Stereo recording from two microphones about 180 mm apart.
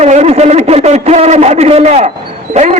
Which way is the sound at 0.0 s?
40° right (ahead or behind).